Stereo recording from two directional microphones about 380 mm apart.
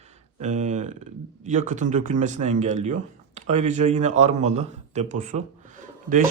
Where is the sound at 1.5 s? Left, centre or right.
Centre.